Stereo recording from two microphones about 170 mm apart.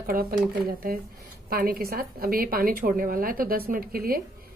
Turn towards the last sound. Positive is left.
turn(degrees=-60)  # may be behind; listen again after turning